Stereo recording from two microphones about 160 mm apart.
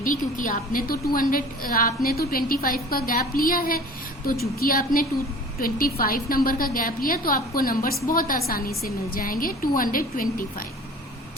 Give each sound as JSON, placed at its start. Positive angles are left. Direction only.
{"t": 0.0, "sound": "a woman's voice", "side_deg": 55}